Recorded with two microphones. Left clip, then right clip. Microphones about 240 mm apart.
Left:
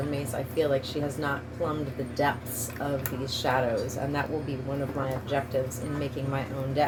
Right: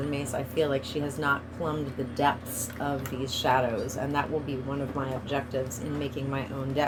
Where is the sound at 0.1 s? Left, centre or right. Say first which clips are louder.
Even; right.